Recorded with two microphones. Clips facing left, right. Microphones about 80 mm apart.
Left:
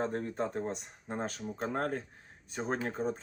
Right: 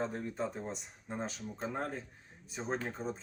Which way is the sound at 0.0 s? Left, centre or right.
Left.